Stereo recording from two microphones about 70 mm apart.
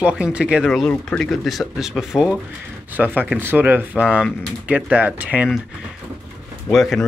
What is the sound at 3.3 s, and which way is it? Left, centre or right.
Speech, right.